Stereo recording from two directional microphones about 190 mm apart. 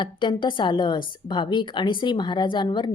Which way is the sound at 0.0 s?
25° left (ahead or behind).